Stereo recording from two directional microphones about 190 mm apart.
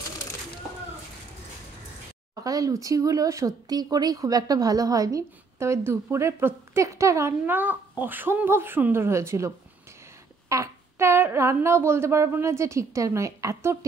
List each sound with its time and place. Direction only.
2.4 s speech: 20° right (ahead or behind)
10.5 s speech: 15° right (ahead or behind)